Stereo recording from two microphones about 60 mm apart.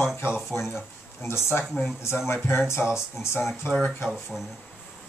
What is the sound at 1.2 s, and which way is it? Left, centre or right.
A man's voice, left.